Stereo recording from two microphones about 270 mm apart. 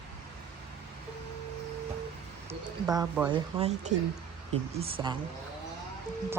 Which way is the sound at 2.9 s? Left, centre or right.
Centre.